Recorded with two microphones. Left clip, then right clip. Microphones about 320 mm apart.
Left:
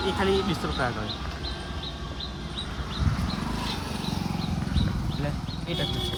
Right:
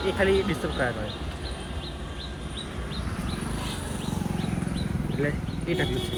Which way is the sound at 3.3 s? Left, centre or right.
Left.